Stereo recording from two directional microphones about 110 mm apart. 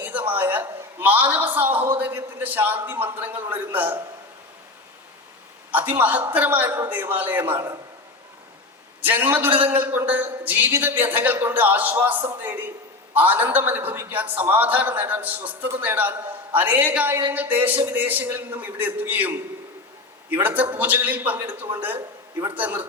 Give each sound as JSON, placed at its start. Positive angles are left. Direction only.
{"t": 0.0, "sound": "a man's voice", "side_deg": -15}
{"t": 5.7, "sound": "a man's voice", "side_deg": -15}
{"t": 9.0, "sound": "a man's voice", "side_deg": -15}